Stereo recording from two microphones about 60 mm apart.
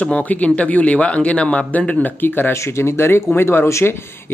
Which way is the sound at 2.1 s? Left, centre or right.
Left.